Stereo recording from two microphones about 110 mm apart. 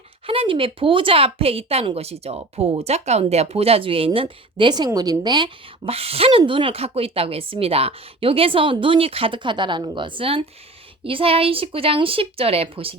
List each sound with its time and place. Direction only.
0.3 s a woman's voice: 55° right (ahead or behind)
5.9 s speech: 60° right (ahead or behind)